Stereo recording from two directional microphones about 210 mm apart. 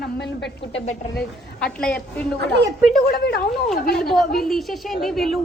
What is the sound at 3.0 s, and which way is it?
Speech, 50° left (ahead or behind).